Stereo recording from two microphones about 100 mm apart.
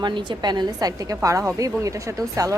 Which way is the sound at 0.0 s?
50° right (ahead or behind).